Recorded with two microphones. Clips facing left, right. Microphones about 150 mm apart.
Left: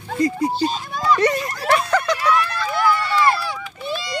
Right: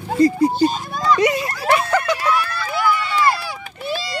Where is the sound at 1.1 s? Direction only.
10° right (ahead or behind).